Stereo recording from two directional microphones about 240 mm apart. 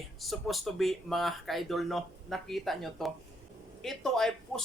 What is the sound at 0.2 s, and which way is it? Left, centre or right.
Speech, centre.